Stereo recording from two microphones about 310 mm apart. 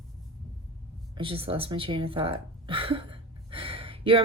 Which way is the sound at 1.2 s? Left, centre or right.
Centre.